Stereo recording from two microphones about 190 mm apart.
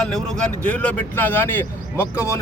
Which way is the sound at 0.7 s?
5° left (ahead or behind).